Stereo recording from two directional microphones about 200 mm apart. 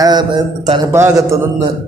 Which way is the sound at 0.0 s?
20° right (ahead or behind).